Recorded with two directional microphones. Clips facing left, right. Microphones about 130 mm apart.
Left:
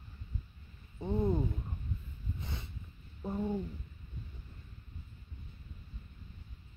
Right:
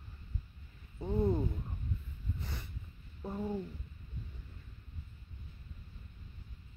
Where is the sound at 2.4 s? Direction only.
20° left (ahead or behind).